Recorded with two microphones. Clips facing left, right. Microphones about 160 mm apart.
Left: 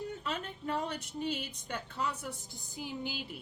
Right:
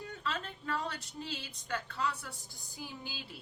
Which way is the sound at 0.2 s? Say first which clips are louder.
Left 1 dB; 20° left (ahead or behind).